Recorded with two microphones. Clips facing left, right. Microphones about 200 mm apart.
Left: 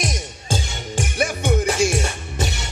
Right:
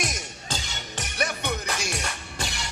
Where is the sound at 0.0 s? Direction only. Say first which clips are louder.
Left 5 dB; 25° left (ahead or behind).